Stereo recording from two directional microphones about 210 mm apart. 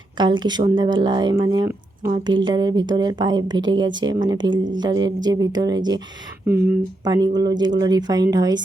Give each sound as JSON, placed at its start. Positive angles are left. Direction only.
{"t": 0.2, "sound": "speech", "side_deg": -20}